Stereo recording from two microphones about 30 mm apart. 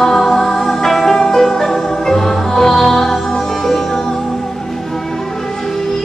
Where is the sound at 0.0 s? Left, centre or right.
Centre.